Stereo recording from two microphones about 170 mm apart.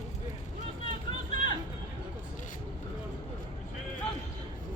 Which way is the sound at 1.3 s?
45° right (ahead or behind).